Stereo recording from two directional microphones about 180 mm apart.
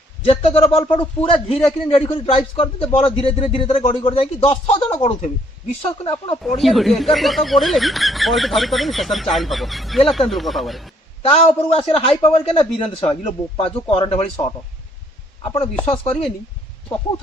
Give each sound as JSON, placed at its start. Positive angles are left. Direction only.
{"t": 0.3, "sound": "a man's voice", "side_deg": 35}
{"t": 6.6, "sound": "speech", "side_deg": 0}
{"t": 11.2, "sound": "a man's voice", "side_deg": 35}
{"t": 15.5, "sound": "a man's voice", "side_deg": 30}